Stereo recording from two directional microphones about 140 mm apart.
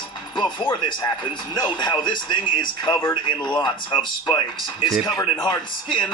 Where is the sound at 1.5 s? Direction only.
30° left (ahead or behind).